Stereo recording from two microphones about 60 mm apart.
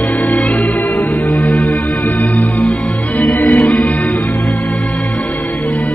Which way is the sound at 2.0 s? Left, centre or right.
Left.